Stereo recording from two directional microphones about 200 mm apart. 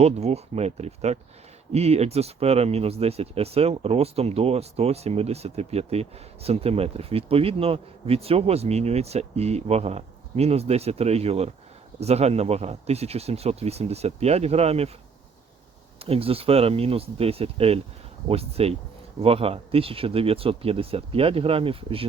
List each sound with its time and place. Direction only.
0.0 s speech: 30° right (ahead or behind)
16.0 s speech: 30° right (ahead or behind)